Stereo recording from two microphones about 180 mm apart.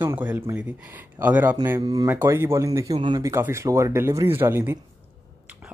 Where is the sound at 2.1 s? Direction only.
10° right (ahead or behind).